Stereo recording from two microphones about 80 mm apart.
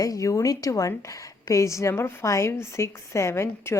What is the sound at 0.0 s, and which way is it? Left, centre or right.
A woman's voice, left.